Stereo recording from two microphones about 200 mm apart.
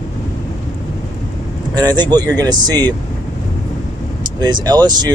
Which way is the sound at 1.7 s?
20° right (ahead or behind).